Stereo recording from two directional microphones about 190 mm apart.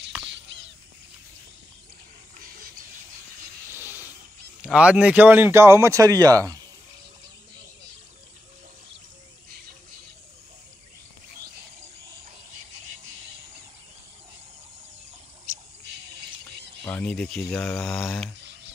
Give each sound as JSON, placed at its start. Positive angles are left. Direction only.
{"t": 0.3, "sound": "a sound", "side_deg": -75}
{"t": 3.7, "sound": "hiss", "side_deg": -10}
{"t": 4.6, "sound": "speech", "side_deg": -5}
{"t": 16.8, "sound": "speech", "side_deg": 5}